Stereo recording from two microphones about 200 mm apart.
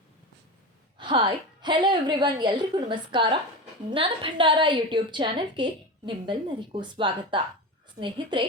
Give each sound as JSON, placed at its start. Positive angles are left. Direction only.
{"t": 0.9, "sound": "a woman's voice", "side_deg": -25}